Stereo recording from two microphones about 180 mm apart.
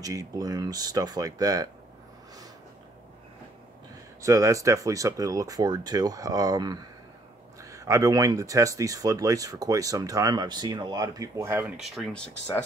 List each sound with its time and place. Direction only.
0.0 s speech: 20° right (ahead or behind)
4.2 s speech: 20° right (ahead or behind); by 12.6 s centre (ahead or behind)